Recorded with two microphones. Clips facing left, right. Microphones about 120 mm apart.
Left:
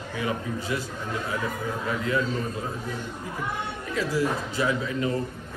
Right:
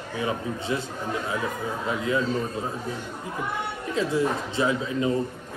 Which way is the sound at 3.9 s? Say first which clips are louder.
Right 2 dB; 25° right (ahead or behind).